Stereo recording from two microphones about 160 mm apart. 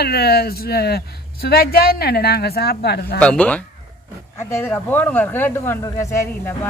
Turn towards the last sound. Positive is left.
turn(degrees=15)  # may be behind; listen again after turning